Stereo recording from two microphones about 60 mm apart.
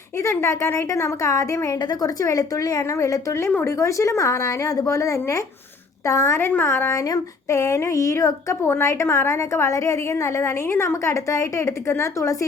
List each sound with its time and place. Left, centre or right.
0.2 s a woman's voice: left
6.4 s speech: left
6.9 s speech: left
7.6 s a woman's voice: left
8.6 s a woman's voice: left